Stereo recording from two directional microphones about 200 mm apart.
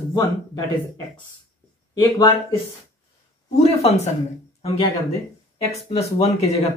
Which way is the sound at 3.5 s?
30° left (ahead or behind).